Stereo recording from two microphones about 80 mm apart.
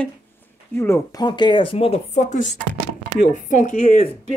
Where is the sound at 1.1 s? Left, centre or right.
Left.